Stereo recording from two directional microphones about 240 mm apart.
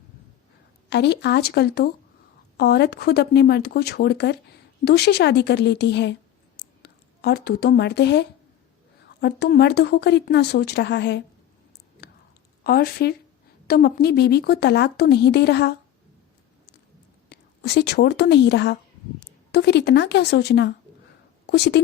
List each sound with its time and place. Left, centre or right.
0.9 s speech: left
12.6 s speech: left
17.2 s a woman's voice: left